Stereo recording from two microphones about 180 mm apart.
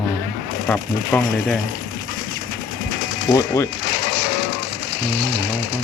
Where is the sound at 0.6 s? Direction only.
20° left (ahead or behind).